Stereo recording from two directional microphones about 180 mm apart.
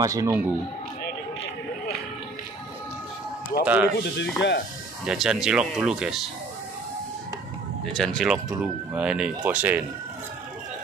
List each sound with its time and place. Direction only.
0.0 s speech: 20° right (ahead or behind)
3.6 s speech: 10° right (ahead or behind)
3.9 s speech: 70° left (ahead or behind)
5.0 s speech: 5° right (ahead or behind)
7.8 s speech: centre (ahead or behind)